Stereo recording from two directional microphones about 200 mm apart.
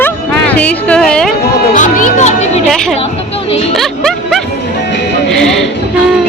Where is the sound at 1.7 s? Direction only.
40° left (ahead or behind).